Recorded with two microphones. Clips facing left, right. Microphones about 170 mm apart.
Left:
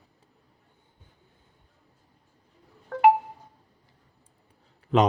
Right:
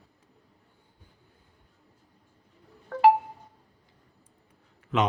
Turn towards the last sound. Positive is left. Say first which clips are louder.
# left 5 dB
turn(degrees=35)  # may be behind; listen again after turning